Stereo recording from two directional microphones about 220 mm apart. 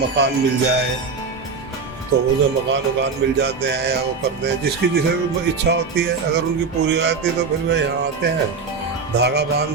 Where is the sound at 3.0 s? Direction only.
50° right (ahead or behind).